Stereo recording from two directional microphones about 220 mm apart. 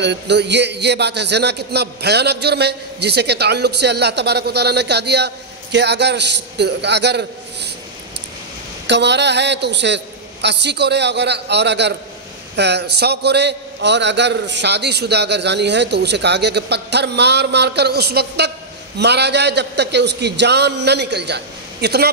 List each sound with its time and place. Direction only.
0.0 s a man's voice: 50° right (ahead or behind)
8.8 s a man's voice: 50° right (ahead or behind)